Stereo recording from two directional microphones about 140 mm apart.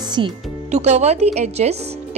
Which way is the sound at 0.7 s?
55° right (ahead or behind).